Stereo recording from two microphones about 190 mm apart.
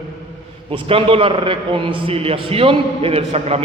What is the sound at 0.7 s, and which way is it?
A man's voice, 30° right (ahead or behind).